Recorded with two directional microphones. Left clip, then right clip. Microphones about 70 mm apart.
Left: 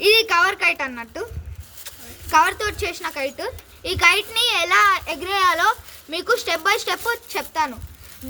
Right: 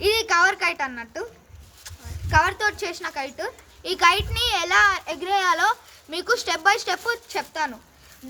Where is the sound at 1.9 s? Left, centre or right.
Centre.